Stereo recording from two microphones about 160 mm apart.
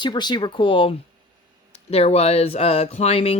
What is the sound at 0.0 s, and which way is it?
Speech, 30° left (ahead or behind).